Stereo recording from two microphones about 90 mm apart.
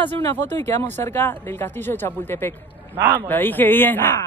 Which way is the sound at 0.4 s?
30° left (ahead or behind).